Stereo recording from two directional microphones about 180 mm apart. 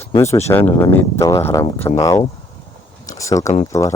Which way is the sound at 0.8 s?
15° left (ahead or behind).